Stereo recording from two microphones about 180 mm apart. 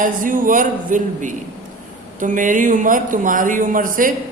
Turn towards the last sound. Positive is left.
turn(degrees=-50)  # may be behind; listen again after turning